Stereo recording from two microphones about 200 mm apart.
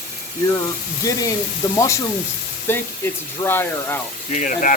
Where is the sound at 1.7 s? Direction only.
15° left (ahead or behind).